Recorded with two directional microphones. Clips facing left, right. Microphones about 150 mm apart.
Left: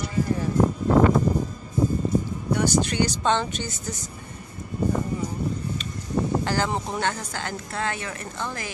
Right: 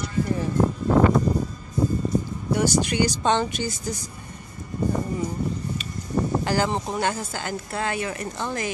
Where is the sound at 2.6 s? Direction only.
10° right (ahead or behind).